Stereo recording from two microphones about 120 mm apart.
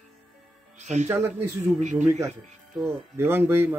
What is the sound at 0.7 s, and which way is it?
Speech, 75° right (ahead or behind).